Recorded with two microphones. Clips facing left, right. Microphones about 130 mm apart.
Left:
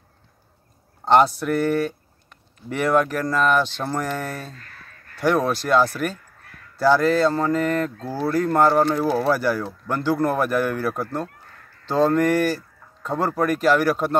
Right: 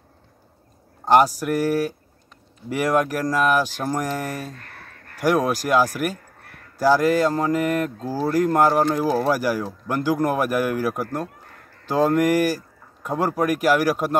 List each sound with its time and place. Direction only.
1.0 s speech: 10° right (ahead or behind)
4.5 s a sound: 55° right (ahead or behind)
5.2 s speech: 10° right (ahead or behind)